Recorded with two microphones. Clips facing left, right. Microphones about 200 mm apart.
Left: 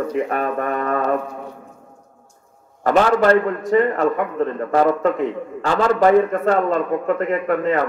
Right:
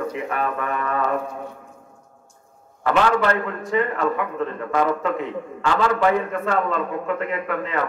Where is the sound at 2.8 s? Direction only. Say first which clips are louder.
Left 4 dB; 40° left (ahead or behind).